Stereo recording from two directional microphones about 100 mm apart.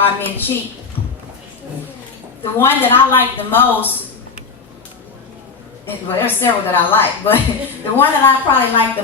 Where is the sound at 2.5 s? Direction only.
20° left (ahead or behind).